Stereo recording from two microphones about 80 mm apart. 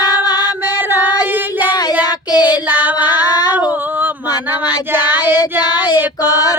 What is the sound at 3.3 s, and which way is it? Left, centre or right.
Female singing, left.